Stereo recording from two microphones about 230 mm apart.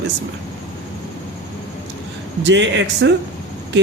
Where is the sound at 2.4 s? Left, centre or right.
Right.